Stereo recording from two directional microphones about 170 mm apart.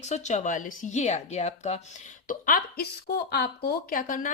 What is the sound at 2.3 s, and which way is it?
A woman's voice, 55° left (ahead or behind).